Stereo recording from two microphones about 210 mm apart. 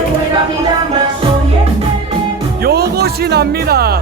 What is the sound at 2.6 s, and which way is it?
Music, 50° right (ahead or behind).